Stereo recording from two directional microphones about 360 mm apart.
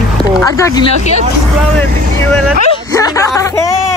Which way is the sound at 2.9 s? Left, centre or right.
Centre.